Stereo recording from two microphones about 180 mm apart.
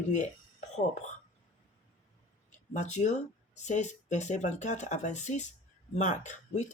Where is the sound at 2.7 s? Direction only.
40° left (ahead or behind).